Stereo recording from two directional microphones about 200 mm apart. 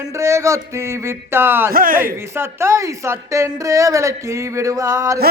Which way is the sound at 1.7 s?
45° right (ahead or behind).